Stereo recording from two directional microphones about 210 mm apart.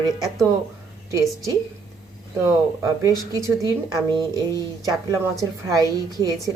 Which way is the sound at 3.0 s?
15° right (ahead or behind).